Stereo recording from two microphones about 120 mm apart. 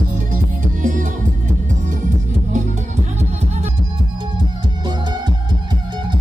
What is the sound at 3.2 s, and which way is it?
Music, 65° right (ahead or behind).